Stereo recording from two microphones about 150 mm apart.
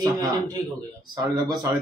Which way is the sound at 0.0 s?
25° right (ahead or behind).